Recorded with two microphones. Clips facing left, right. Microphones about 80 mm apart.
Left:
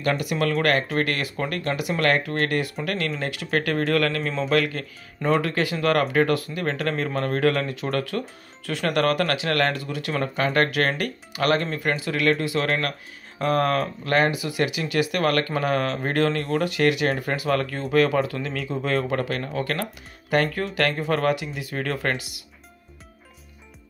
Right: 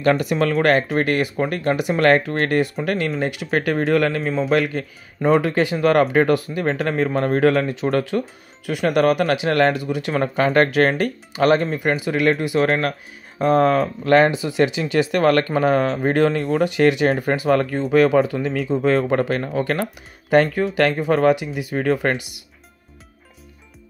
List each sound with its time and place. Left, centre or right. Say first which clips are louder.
0.0 s speech: right 6 dB; right
4.2 s a man's voice: right 4 dB; centre
4.6 s speech: right 3 dB; right